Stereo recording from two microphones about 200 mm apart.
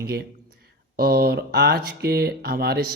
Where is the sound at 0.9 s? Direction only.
50° right (ahead or behind).